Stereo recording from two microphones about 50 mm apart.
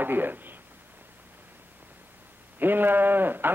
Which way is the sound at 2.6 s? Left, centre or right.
Right.